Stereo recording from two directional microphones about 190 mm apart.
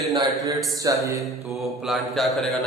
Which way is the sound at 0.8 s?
20° right (ahead or behind).